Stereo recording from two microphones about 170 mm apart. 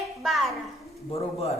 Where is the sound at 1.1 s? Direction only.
35° left (ahead or behind).